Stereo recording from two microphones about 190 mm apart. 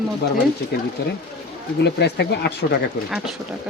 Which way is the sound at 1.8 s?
60° left (ahead or behind).